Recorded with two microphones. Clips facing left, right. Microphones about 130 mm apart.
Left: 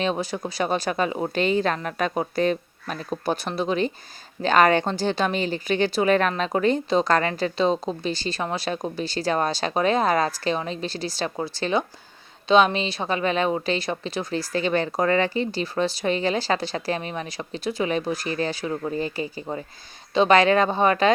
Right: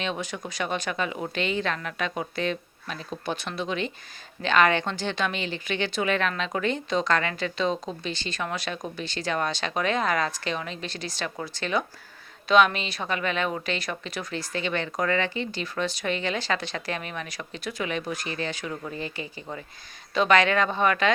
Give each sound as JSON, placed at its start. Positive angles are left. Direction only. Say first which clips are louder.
{"t": 0.0, "sound": "a woman's voice", "louder": "left 6 dB", "side_deg": 35}